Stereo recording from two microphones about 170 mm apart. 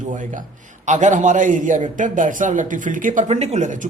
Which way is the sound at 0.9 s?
45° right (ahead or behind).